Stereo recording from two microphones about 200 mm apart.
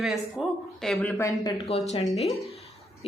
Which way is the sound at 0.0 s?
Centre (ahead or behind).